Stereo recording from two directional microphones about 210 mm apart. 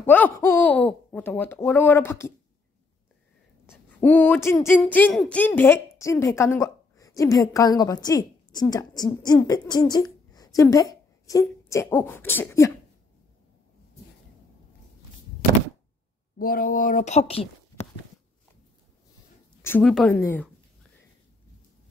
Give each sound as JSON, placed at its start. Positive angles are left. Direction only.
{"t": 0.0, "sound": "speech", "side_deg": 10}
{"t": 3.6, "sound": "speech", "side_deg": 10}
{"t": 10.3, "sound": "a sound", "side_deg": 15}
{"t": 11.7, "sound": "speech", "side_deg": 10}
{"t": 16.3, "sound": "a woman's voice", "side_deg": 45}
{"t": 19.6, "sound": "speech", "side_deg": 5}